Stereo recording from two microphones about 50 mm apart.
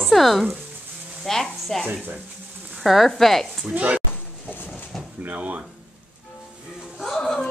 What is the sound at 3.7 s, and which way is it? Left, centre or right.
Speech, right.